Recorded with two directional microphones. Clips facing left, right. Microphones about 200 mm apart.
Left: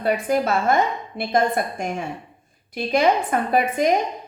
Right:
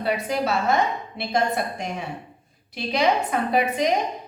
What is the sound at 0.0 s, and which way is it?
A woman's voice, 50° left (ahead or behind).